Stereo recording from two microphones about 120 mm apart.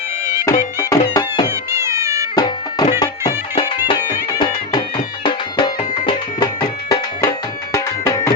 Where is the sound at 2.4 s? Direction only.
35° left (ahead or behind).